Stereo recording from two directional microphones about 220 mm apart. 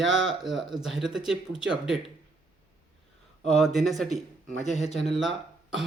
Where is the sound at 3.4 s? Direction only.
Centre (ahead or behind).